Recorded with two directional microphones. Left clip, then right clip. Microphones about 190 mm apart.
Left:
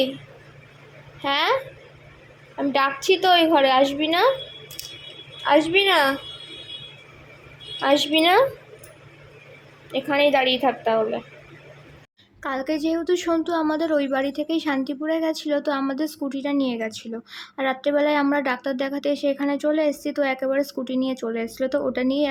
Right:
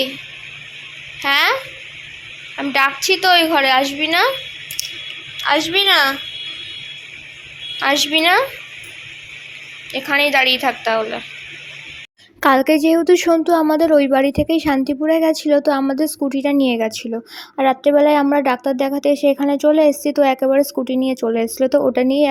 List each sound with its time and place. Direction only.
1.2 s a woman's voice: 10° left (ahead or behind)
2.6 s a woman's voice: 10° left (ahead or behind)
5.4 s a woman's voice: 20° left (ahead or behind)
7.8 s a woman's voice: 10° left (ahead or behind)
9.9 s a woman's voice: 10° left (ahead or behind)
12.4 s a woman's voice: 45° right (ahead or behind); by 22.3 s 30° right (ahead or behind)